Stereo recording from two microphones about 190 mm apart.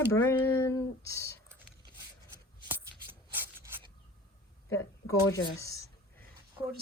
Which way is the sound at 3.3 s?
10° right (ahead or behind).